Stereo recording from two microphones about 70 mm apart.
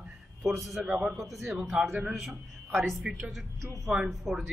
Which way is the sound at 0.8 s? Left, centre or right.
Centre.